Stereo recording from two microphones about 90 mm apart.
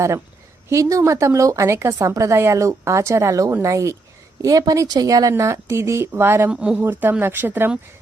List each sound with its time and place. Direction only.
0.7 s speech: 35° right (ahead or behind)
6.5 s speech: 15° right (ahead or behind)